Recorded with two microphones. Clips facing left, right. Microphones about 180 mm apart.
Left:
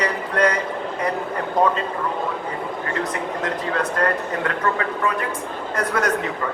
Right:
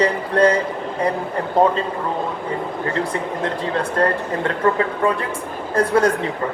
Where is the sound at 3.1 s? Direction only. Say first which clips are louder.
Right 2 dB; 30° right (ahead or behind).